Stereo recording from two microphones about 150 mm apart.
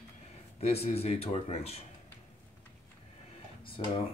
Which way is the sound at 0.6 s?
45° left (ahead or behind).